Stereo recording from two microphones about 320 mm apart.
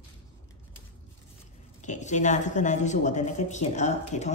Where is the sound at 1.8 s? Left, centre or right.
Left.